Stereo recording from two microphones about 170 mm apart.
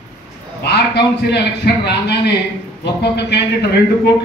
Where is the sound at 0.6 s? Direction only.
75° left (ahead or behind).